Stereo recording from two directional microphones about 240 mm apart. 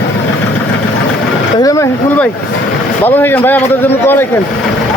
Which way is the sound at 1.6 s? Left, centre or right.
Centre.